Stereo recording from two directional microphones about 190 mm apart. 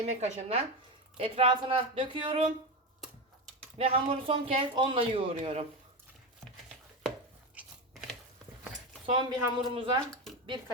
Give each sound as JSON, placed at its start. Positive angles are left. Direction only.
{"t": 0.0, "sound": "a man's voice", "side_deg": -35}
{"t": 3.8, "sound": "a man's voice", "side_deg": -30}
{"t": 9.0, "sound": "a man's voice", "side_deg": -25}